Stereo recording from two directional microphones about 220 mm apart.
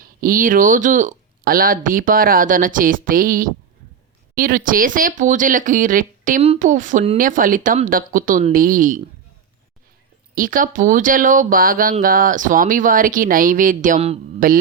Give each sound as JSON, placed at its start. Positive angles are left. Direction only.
{"t": 0.0, "sound": "speech", "side_deg": -40}
{"t": 10.3, "sound": "speech", "side_deg": -40}